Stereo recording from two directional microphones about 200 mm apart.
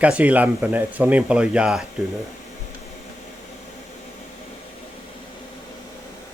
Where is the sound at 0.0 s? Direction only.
5° right (ahead or behind).